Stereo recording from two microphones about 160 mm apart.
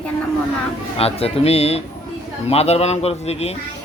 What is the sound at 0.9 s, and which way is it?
A man's voice, 40° left (ahead or behind).